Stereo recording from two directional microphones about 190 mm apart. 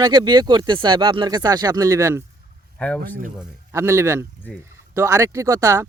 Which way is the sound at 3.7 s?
15° right (ahead or behind).